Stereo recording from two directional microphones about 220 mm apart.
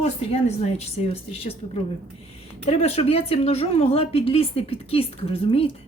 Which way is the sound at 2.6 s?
25° left (ahead or behind).